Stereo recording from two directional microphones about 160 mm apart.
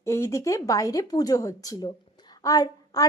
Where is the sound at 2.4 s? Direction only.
25° left (ahead or behind).